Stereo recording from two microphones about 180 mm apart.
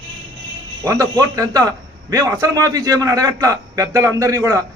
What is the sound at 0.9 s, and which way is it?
A man's voice, 20° right (ahead or behind).